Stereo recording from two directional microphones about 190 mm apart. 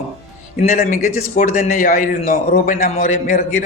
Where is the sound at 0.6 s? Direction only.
40° left (ahead or behind).